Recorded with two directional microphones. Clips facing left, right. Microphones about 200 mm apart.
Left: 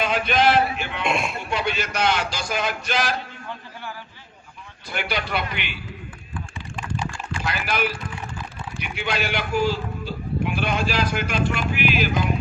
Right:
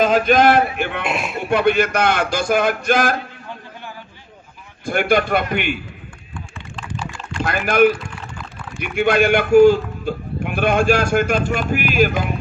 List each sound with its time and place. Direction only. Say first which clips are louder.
0.0 s a man's voice: right 7 dB; 45° right (ahead or behind)
1.0 s speech: right 1 dB; centre (ahead or behind)
1.4 s a man's voice: right 10 dB; 55° right (ahead or behind)
4.9 s a man's voice: right 10 dB; 50° right (ahead or behind)
6.3 s rowboat: even; 5° left (ahead or behind)
7.4 s a man's voice: right 11 dB; 50° right (ahead or behind)